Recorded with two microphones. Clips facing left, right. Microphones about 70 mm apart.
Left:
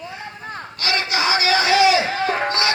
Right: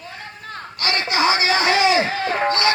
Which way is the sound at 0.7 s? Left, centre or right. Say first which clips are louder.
Right 2 dB; right.